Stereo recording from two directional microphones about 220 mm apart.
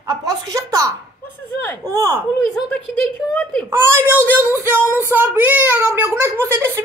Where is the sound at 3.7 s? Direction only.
10° right (ahead or behind).